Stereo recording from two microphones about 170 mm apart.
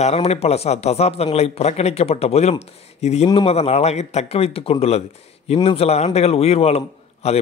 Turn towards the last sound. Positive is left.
turn(degrees=35)  # may be behind; listen again after turning